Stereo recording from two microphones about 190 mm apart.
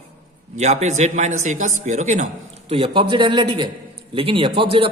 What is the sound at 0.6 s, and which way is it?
A man's voice, 35° right (ahead or behind).